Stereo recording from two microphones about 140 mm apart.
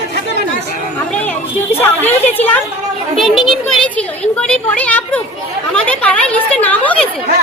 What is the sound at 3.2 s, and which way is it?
Speech, centre (ahead or behind).